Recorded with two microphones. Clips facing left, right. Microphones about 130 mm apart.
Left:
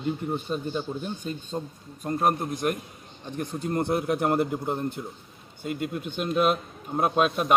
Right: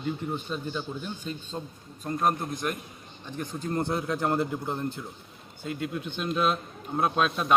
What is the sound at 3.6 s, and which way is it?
Speech, 20° left (ahead or behind).